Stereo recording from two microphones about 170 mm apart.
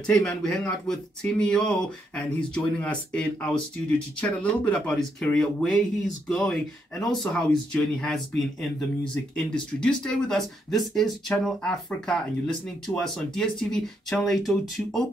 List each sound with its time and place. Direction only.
0.0 s speech: 5° left (ahead or behind)
9.5 s speech: 5° left (ahead or behind)